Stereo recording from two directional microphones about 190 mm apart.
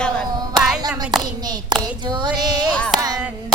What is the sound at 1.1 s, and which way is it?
Speech, centre (ahead or behind).